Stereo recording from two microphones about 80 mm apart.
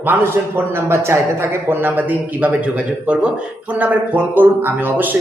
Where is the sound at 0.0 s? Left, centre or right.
Right.